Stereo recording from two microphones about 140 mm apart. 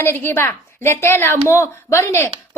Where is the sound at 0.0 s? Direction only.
15° left (ahead or behind).